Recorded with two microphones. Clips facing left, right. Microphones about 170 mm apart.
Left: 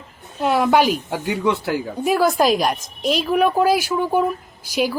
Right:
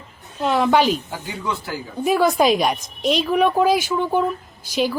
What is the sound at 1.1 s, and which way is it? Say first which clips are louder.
Speech: left 7 dB; 70° left (ahead or behind).